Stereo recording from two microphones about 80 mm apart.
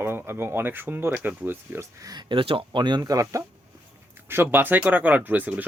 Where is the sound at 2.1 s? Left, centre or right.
Right.